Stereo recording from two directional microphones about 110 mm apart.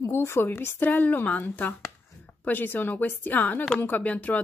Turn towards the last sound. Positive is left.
turn(degrees=15)  # may be behind; listen again after turning